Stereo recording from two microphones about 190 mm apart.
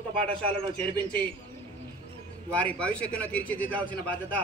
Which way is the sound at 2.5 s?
5° left (ahead or behind).